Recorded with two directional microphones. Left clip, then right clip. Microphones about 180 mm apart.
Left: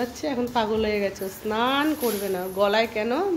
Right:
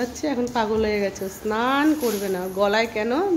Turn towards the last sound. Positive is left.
turn(degrees=-10)  # may be behind; listen again after turning